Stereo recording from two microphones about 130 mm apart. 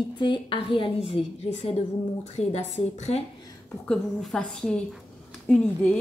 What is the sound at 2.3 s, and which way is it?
Speech, 60° left (ahead or behind).